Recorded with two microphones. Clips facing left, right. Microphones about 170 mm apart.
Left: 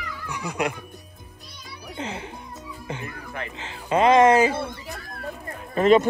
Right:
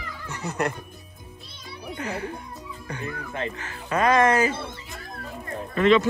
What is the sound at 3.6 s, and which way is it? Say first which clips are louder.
Speech: left 5 dB; 20° left (ahead or behind).